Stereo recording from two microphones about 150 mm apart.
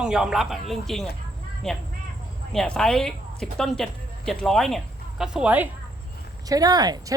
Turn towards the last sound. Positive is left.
turn(degrees=-25)  # may be behind; listen again after turning